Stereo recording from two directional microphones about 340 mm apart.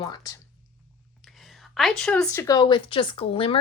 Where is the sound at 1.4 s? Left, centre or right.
Centre.